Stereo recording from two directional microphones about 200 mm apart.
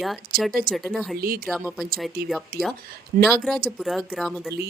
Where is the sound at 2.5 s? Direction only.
50° right (ahead or behind).